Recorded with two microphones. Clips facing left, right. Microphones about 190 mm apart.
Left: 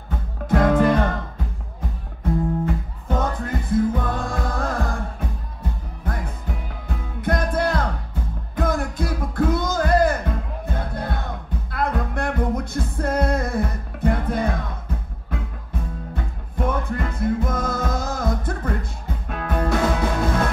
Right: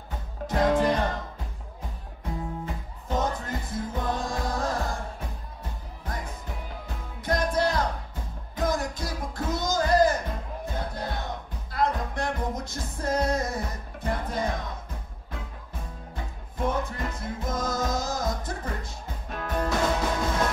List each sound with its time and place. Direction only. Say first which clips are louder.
0.1 s music: left 8 dB; 55° left (ahead or behind)
2.6 s music: left 10 dB; 55° left (ahead or behind)
6.9 s music: left 5 dB; 55° left (ahead or behind)
16.5 s music: left 4 dB; 55° left (ahead or behind)